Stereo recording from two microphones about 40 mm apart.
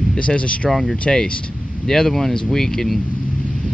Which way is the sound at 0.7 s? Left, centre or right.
Centre.